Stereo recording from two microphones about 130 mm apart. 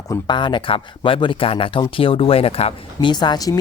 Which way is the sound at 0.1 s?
35° left (ahead or behind).